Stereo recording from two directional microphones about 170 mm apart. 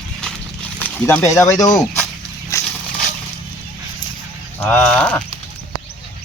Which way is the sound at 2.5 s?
20° left (ahead or behind).